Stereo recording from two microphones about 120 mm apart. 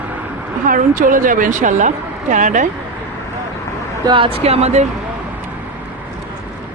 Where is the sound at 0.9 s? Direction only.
90° right.